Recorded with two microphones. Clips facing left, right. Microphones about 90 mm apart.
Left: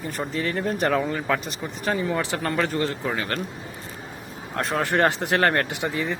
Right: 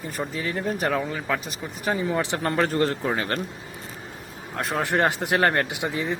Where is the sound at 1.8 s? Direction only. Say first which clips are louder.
Even; 15° right (ahead or behind).